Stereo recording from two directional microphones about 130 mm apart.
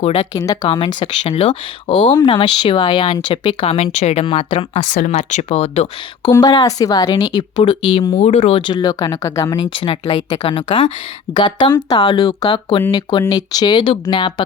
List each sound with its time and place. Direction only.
0.0 s speech: 45° left (ahead or behind)
0.3 s speech: 30° left (ahead or behind); by 4.8 s 45° left (ahead or behind)
4.8 s speech: 70° left (ahead or behind); by 5.9 s 50° left (ahead or behind)
6.2 s speech: 30° left (ahead or behind)
8.1 s speech: 60° left (ahead or behind)
8.5 s speech: 35° left (ahead or behind)
9.6 s speech: 40° left (ahead or behind)